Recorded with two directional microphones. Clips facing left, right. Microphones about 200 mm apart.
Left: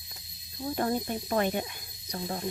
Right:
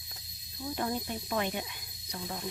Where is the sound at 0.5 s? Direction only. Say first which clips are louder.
Left 5 dB; 45° left (ahead or behind).